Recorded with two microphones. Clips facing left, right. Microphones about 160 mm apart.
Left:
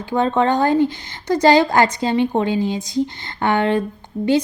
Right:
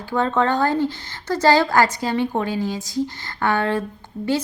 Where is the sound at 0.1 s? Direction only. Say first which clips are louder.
Left 3 dB; 20° left (ahead or behind).